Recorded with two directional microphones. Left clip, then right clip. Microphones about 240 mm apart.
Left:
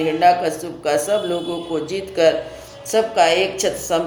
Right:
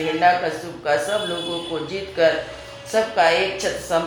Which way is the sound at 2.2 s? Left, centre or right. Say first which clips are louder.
Left 2 dB; left.